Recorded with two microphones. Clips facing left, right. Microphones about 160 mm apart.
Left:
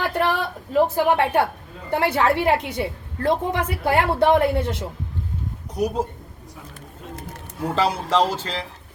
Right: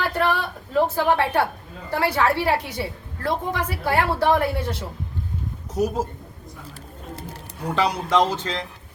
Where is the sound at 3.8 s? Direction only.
20° left (ahead or behind).